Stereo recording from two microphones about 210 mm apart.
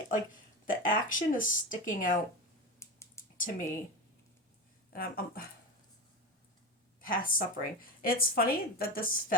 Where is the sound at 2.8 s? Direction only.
15° left (ahead or behind).